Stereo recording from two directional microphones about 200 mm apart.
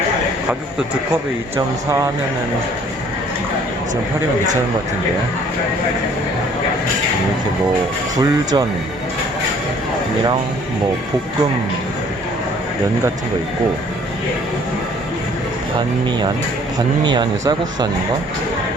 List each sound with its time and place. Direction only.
1.5 s speech: 15° right (ahead or behind)
8.2 s speech: 20° right (ahead or behind)
17.0 s speech: 20° right (ahead or behind)